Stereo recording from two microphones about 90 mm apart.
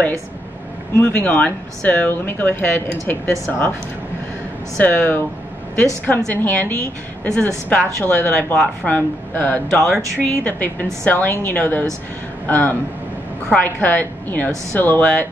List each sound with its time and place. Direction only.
0.9 s speech: 20° left (ahead or behind)
4.8 s a woman's voice: 20° left (ahead or behind)
9.8 s speech: 5° left (ahead or behind)
10.4 s a woman's voice: 20° left (ahead or behind)